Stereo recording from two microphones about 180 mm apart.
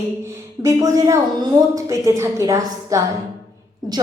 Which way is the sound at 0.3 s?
15° right (ahead or behind).